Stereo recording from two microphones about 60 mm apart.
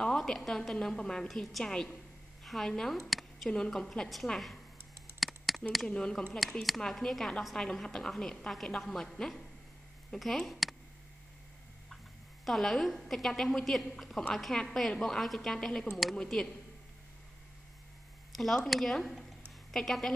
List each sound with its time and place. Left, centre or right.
0.2 s a woman's voice: centre
3.1 s a sound: centre
3.4 s a woman's voice: centre
5.2 s a sound: centre
5.9 s a woman's voice: centre
12.4 s a woman's voice: centre
18.3 s a woman's voice: centre